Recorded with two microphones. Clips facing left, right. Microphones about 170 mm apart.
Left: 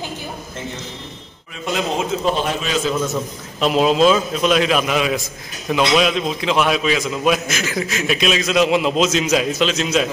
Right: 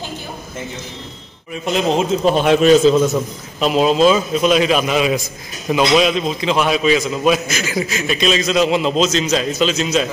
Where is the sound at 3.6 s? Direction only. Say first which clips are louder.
Right 1 dB; centre (ahead or behind).